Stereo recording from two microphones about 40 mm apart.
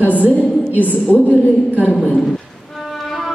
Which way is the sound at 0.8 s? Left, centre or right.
Left.